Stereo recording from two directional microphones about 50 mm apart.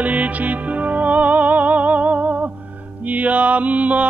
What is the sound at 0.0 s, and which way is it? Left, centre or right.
Music, right.